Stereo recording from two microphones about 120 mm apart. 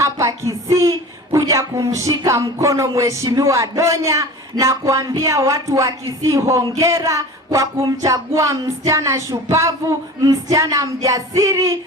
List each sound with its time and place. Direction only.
0.0 s speech: 25° right (ahead or behind)